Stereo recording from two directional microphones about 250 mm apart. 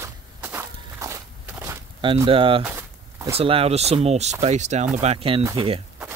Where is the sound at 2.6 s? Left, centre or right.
Centre.